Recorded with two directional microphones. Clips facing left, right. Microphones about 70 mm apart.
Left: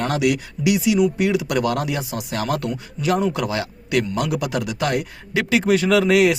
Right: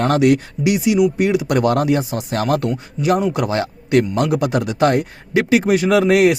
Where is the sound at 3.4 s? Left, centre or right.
Right.